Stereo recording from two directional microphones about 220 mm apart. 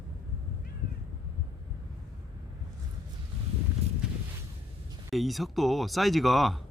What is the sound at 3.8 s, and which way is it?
Walk, 30° right (ahead or behind).